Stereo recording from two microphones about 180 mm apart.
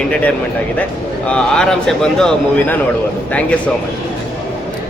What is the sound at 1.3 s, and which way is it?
A man's voice, 5° left (ahead or behind).